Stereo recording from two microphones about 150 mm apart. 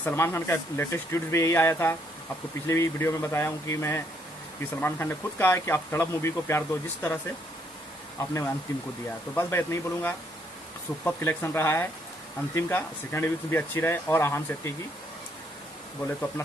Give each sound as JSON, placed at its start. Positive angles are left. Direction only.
{"t": 0.0, "sound": "speech", "side_deg": 15}
{"t": 8.2, "sound": "speech", "side_deg": 20}
{"t": 16.4, "sound": "speech", "side_deg": 20}